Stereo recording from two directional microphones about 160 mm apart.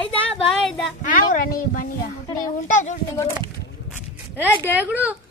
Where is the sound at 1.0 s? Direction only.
55° left (ahead or behind).